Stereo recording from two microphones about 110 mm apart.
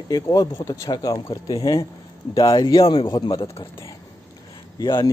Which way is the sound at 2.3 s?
50° left (ahead or behind).